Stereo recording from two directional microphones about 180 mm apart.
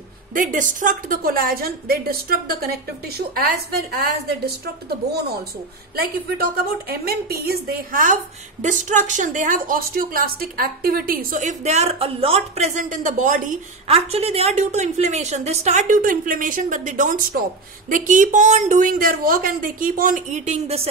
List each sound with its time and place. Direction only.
0.3 s a woman's voice: 45° right (ahead or behind)
13.8 s a woman's voice: 35° right (ahead or behind)